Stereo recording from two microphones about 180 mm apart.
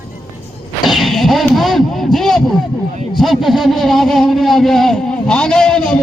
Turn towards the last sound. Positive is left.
turn(degrees=5)  # may be behind; listen again after turning